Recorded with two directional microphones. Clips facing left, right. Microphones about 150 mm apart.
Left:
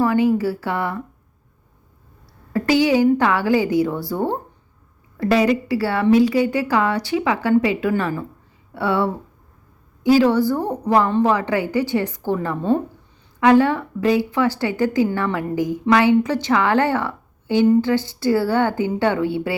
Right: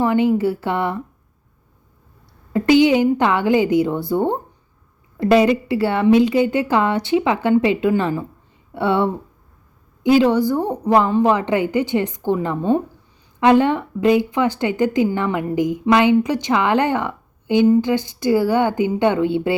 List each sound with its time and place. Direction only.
0.0 s a woman's voice: 25° right (ahead or behind)
2.5 s a woman's voice: 20° right (ahead or behind)